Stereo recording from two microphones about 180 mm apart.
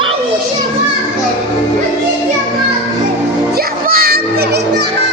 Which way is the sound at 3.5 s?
55° right (ahead or behind).